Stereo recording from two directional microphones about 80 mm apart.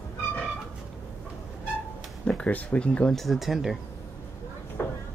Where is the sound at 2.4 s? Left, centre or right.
Centre.